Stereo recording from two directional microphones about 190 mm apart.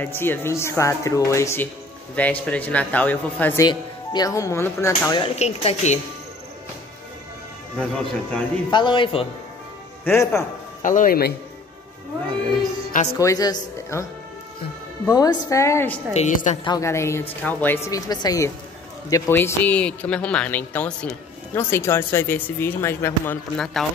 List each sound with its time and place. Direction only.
0.0 s speech: 10° left (ahead or behind)
3.6 s speech: 20° left (ahead or behind)
5.2 s speech: 35° left (ahead or behind)
7.8 s speech: 5° left (ahead or behind)
8.6 s speech: 25° left (ahead or behind)
10.0 s speech: 15° left (ahead or behind)
10.8 s speech: 45° left (ahead or behind)
13.2 s speech: 20° left (ahead or behind)
15.0 s speech: 20° left (ahead or behind)
16.1 s speech: 40° left (ahead or behind)
16.6 s speech: 15° left (ahead or behind); by 23.9 s centre (ahead or behind)